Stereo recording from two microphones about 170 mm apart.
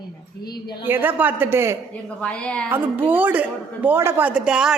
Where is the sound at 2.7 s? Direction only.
10° right (ahead or behind).